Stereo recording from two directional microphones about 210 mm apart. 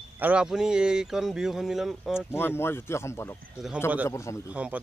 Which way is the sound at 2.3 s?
10° left (ahead or behind).